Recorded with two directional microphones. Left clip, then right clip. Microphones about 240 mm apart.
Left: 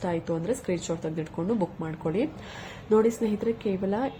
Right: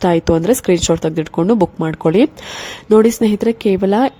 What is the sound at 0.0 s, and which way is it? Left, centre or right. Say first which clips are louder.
A woman's voice: right 16 dB; right.